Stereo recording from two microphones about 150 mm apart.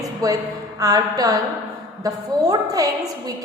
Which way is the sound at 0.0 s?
25° right (ahead or behind).